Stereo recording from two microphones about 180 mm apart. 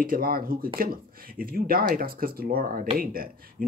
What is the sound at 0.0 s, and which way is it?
Speech, 55° right (ahead or behind).